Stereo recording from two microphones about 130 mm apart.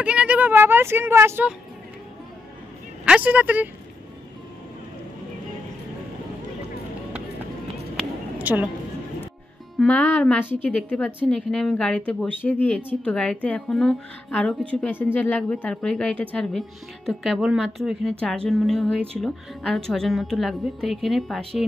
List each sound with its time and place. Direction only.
0.0 s speech: 10° right (ahead or behind)
3.1 s speech: 10° right (ahead or behind)
8.4 s a woman's voice: 15° right (ahead or behind)
9.8 s a woman's voice: 10° left (ahead or behind)